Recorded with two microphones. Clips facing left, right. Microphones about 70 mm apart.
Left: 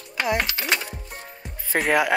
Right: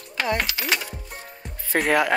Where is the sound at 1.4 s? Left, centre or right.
Centre.